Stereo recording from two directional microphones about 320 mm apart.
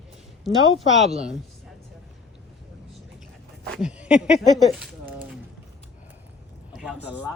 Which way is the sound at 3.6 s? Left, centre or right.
Centre.